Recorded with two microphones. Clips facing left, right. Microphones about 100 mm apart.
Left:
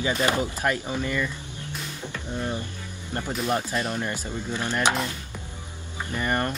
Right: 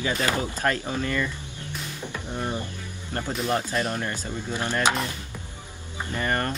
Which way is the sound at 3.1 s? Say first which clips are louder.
Even; 20° left (ahead or behind).